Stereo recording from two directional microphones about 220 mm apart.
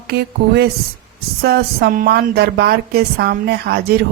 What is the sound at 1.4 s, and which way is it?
A woman's voice, 45° right (ahead or behind).